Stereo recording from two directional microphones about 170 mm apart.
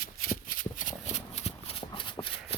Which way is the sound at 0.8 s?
45° left (ahead or behind).